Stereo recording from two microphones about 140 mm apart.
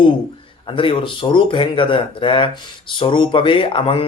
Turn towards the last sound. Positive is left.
turn(degrees=40)  # may be behind; listen again after turning